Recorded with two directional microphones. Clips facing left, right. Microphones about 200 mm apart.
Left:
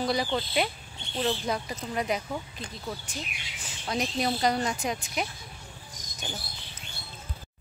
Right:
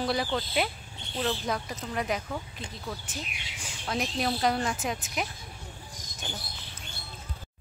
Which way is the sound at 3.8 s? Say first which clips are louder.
Left 1 dB; centre (ahead or behind).